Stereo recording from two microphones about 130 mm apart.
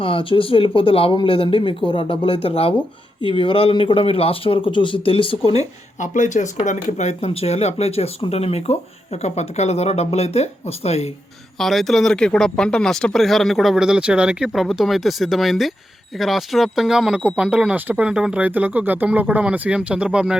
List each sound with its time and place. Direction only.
0.0 s speech: 45° left (ahead or behind)
6.0 s speech: 70° left (ahead or behind); by 11.1 s 55° left (ahead or behind)
11.5 s speech: centre (ahead or behind)